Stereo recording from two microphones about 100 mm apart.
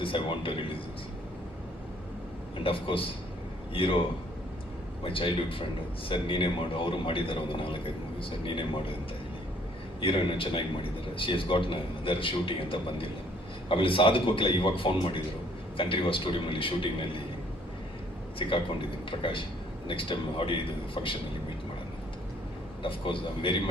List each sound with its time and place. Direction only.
0.0 s a man's voice: 60° left (ahead or behind)
2.6 s a man's voice: 65° left (ahead or behind)
5.0 s a man's voice: 65° left (ahead or behind)
10.0 s a man's voice: 60° left (ahead or behind)
18.3 s a man's voice: 60° left (ahead or behind)
22.8 s a man's voice: 60° left (ahead or behind)